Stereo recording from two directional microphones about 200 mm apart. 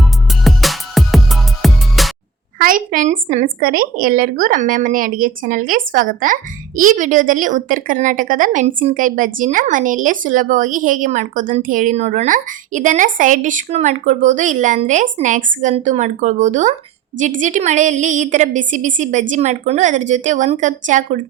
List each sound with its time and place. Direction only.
0.0 s music: centre (ahead or behind)
2.6 s a woman's voice: 45° right (ahead or behind)